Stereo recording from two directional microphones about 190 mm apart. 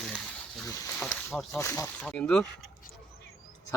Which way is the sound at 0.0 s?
Centre (ahead or behind).